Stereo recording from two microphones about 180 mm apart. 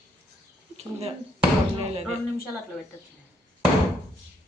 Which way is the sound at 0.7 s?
35° right (ahead or behind).